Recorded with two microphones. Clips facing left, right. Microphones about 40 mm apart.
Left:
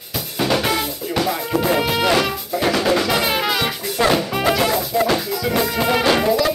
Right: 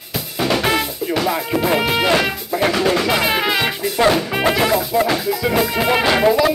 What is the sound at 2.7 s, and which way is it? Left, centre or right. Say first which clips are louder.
Music: left 1 dB; centre.